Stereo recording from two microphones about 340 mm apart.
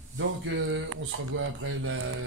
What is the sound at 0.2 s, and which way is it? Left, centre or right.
Speech, right.